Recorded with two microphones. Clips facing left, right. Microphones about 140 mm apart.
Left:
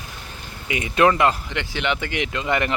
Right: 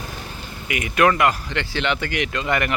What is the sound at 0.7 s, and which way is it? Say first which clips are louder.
A man's voice: left 1 dB; 25° left (ahead or behind).